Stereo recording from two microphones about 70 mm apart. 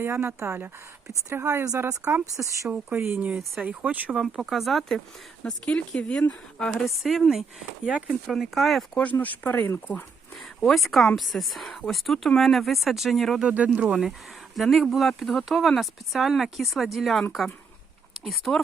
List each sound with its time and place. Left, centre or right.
0.3 s speech: right
2.3 s speech: right
2.6 s speech: right
4.2 s speech: centre
5.4 s speech: centre
6.7 s speech: centre
7.9 s speech: centre
8.3 s speech: centre
9.1 s speech: left
10.6 s speech: centre
13.4 s speech: centre
14.5 s speech: centre
18.3 s speech: centre